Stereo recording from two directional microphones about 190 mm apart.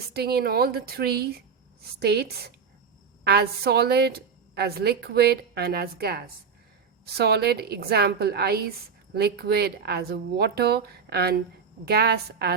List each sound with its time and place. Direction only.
0.1 s a woman's voice: 55° right (ahead or behind)